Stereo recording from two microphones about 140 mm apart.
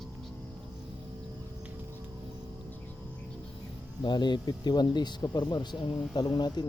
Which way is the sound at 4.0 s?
30° left (ahead or behind).